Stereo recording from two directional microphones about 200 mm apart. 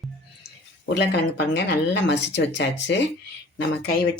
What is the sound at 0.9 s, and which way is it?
Speech, 55° left (ahead or behind).